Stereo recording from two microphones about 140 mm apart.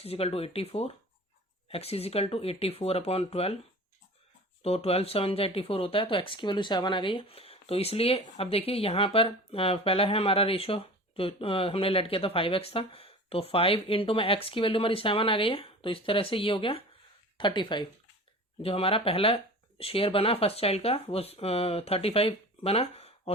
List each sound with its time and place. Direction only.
0.0 s speech: 45° left (ahead or behind)
4.6 s speech: 45° left (ahead or behind)